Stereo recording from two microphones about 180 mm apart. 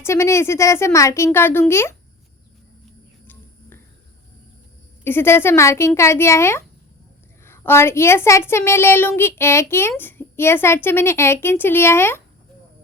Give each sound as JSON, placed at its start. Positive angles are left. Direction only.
{"t": 0.0, "sound": "a child's voice", "side_deg": 15}
{"t": 5.0, "sound": "a child's voice", "side_deg": 15}